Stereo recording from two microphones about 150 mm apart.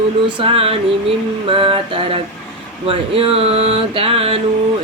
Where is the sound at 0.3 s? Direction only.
35° right (ahead or behind).